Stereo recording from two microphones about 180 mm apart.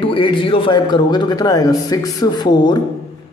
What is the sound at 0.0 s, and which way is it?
Speech, 30° left (ahead or behind).